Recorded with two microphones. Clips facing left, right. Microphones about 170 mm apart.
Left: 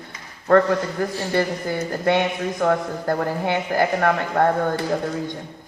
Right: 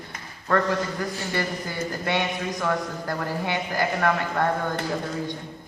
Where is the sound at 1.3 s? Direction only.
50° left (ahead or behind).